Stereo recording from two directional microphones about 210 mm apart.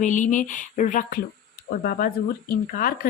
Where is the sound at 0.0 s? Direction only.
35° left (ahead or behind).